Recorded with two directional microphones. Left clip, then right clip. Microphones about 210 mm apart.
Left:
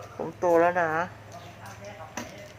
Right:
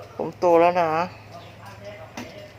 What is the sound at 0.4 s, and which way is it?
Speech, 30° right (ahead or behind).